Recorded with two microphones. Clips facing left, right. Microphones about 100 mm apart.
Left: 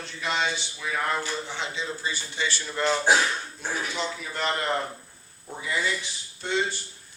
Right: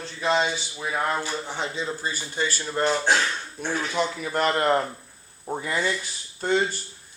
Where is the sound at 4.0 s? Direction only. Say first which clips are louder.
Right 6 dB; 50° right (ahead or behind).